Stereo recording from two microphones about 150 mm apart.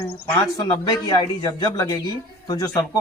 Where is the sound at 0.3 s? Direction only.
25° left (ahead or behind).